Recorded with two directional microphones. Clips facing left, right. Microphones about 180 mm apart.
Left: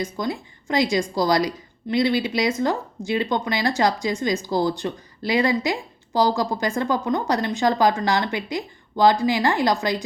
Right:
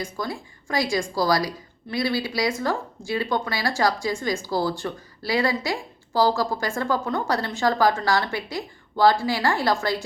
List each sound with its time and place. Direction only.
0.0 s a woman's voice: 20° left (ahead or behind)